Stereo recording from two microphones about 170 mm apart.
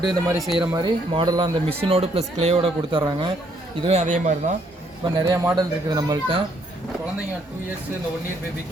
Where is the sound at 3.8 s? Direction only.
40° right (ahead or behind).